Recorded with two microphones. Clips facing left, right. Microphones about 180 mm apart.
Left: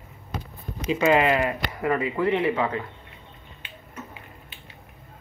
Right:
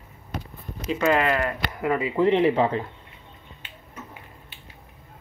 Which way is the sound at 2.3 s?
30° right (ahead or behind).